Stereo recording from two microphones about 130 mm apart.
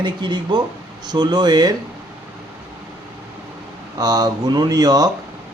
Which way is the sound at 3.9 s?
30° right (ahead or behind).